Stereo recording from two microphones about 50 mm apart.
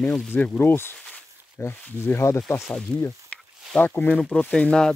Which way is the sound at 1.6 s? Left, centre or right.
Left.